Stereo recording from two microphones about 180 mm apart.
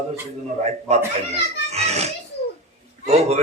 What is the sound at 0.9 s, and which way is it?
Speech, 35° right (ahead or behind).